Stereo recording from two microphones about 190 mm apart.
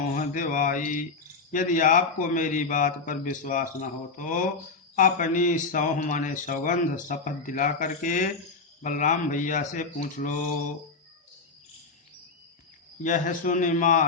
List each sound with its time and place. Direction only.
0.1 s mantra: 45° left (ahead or behind)
1.5 s a man's voice: 45° left (ahead or behind)
13.0 s a man's voice: 40° left (ahead or behind)